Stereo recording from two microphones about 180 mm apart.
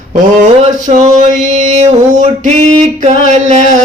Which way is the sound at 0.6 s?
40° right (ahead or behind).